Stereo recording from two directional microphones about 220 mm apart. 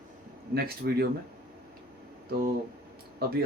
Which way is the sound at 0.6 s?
45° right (ahead or behind).